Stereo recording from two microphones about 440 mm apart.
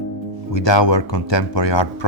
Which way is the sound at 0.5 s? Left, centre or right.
Left.